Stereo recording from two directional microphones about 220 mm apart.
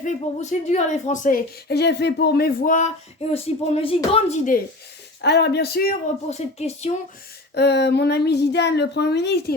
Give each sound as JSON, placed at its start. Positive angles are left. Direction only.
{"t": 0.7, "sound": "speech", "side_deg": 30}
{"t": 5.2, "sound": "speech", "side_deg": 50}
{"t": 7.5, "sound": "speech", "side_deg": 50}